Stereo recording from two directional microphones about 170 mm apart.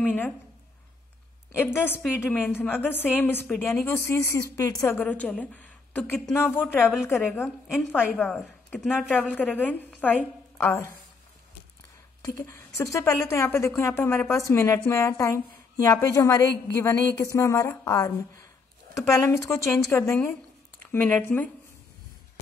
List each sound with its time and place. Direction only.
0.0 s a woman's voice: 10° left (ahead or behind)
1.5 s a woman's voice: 15° left (ahead or behind)
8.2 s a woman's voice: centre (ahead or behind)
12.2 s a woman's voice: 20° left (ahead or behind)